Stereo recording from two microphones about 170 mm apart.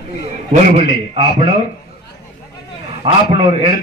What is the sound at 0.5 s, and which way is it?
Speech, 40° right (ahead or behind).